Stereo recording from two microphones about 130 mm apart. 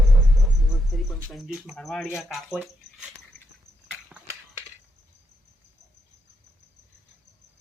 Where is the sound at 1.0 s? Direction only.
Centre (ahead or behind).